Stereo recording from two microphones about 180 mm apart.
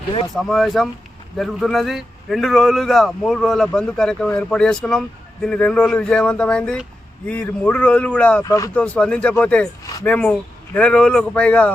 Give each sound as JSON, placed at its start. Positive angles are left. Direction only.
{"t": 0.3, "sound": "a man's voice", "side_deg": 0}
{"t": 8.4, "sound": "speech", "side_deg": 20}
{"t": 8.7, "sound": "speech", "side_deg": 5}